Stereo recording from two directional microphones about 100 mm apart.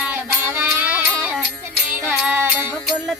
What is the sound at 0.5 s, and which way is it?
Music, 15° right (ahead or behind).